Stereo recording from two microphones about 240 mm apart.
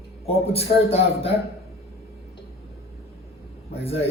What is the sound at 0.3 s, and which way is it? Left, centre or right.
A man's voice, left.